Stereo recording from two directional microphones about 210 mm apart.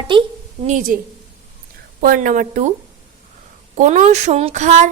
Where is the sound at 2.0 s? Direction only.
40° right (ahead or behind).